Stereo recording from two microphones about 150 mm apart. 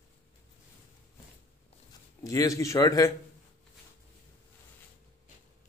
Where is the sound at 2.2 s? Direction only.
25° left (ahead or behind).